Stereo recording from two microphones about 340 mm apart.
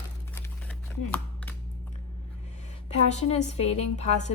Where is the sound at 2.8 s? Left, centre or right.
Centre.